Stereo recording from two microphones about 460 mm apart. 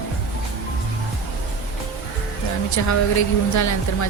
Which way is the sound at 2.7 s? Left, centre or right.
Left.